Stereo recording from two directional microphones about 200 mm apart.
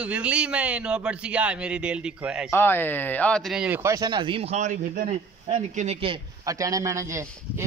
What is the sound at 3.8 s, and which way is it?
A man's voice, 20° right (ahead or behind).